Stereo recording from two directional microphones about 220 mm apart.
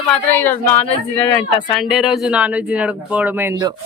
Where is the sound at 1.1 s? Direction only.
25° left (ahead or behind).